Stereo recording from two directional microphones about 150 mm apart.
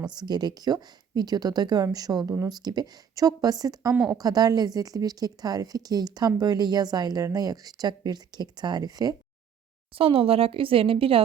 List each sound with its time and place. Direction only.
0.0 s speech: 30° right (ahead or behind)
9.9 s speech: 40° right (ahead or behind)